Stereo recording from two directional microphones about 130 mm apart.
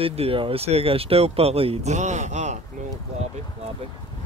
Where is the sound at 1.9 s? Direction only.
65° right (ahead or behind).